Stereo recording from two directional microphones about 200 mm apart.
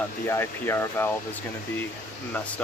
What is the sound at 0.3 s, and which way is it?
Speech, 10° left (ahead or behind).